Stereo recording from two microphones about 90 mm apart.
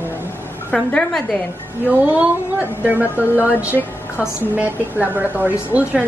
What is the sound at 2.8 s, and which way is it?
A woman's voice, 15° right (ahead or behind).